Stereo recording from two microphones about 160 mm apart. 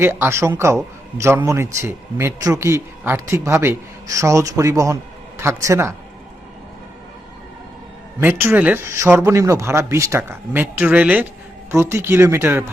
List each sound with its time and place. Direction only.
0.0 s a man's voice: 15° right (ahead or behind)
8.2 s a man's voice: 15° right (ahead or behind)